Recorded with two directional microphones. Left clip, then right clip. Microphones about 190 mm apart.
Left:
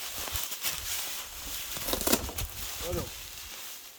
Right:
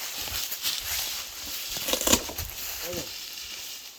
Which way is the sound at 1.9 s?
5° right (ahead or behind).